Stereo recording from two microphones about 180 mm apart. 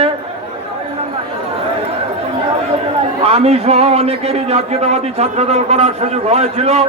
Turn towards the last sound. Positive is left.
turn(degrees=-35)  # may be behind; listen again after turning